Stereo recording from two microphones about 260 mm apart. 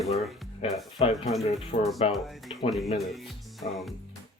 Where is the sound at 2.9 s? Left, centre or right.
Centre.